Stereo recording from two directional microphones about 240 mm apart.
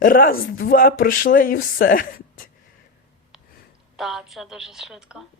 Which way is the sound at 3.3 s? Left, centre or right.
Centre.